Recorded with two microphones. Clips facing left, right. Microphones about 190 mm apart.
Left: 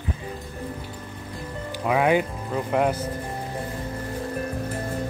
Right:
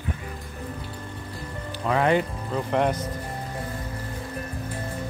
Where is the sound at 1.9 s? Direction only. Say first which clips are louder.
Left 1 dB; 10° left (ahead or behind).